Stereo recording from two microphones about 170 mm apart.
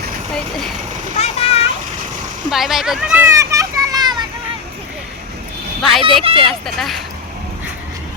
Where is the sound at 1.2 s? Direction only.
35° left (ahead or behind).